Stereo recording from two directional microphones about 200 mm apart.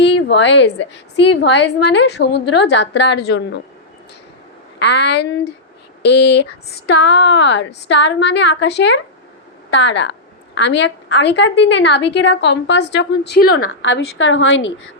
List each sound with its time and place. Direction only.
0.0 s a woman's voice: 60° left (ahead or behind)
4.8 s speech: 60° left (ahead or behind)
13.6 s a woman's voice: 70° left (ahead or behind)